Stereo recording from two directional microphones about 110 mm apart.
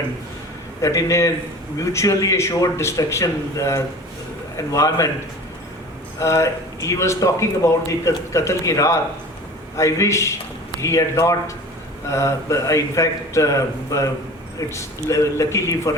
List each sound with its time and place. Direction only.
0.8 s a man's voice: 30° left (ahead or behind)
6.1 s speech: 25° left (ahead or behind)